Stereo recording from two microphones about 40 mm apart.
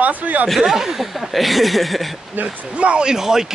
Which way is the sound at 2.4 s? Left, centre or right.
Right.